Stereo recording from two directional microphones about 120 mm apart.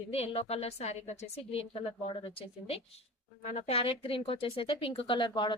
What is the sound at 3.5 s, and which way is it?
Speech, 65° left (ahead or behind).